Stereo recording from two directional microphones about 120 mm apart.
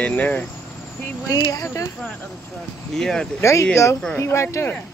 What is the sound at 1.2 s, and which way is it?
Speech, 30° left (ahead or behind).